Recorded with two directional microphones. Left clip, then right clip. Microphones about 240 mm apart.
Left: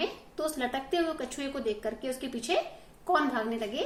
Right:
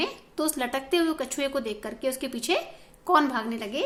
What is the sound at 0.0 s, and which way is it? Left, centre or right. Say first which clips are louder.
A woman's voice: right 3 dB; right.